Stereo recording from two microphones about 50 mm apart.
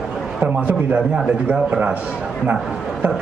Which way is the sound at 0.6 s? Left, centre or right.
Right.